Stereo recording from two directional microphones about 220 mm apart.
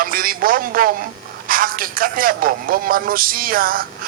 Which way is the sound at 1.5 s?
40° right (ahead or behind).